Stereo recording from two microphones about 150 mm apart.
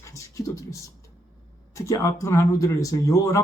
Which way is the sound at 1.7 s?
20° left (ahead or behind).